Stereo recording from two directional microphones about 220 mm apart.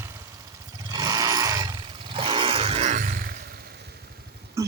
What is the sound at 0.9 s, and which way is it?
Roar, 15° right (ahead or behind).